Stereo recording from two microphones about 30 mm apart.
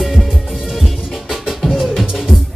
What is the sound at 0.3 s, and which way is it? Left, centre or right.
Music, centre.